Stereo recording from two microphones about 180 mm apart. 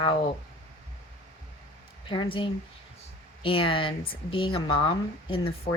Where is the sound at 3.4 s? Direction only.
30° left (ahead or behind).